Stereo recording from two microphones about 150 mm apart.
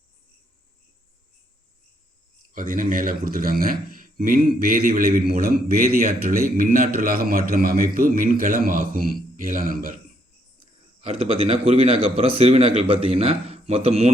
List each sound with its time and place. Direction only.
2.5 s a man's voice: 65° right (ahead or behind)
11.0 s a man's voice: 40° right (ahead or behind)